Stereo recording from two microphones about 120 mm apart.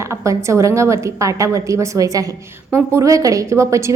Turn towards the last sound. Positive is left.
turn(degrees=-25)  # may be behind; listen again after turning